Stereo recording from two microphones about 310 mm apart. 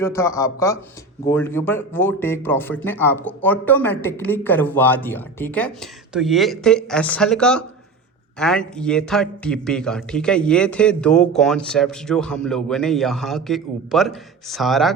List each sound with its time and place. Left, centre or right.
0.0 s a man's voice: centre